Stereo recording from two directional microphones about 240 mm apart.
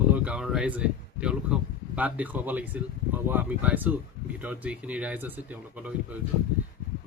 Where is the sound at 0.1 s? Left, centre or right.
Centre.